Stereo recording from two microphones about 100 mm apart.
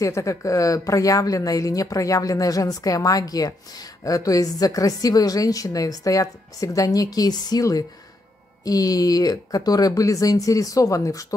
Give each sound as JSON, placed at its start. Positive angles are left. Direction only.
{"t": 0.0, "sound": "a woman's voice", "side_deg": 30}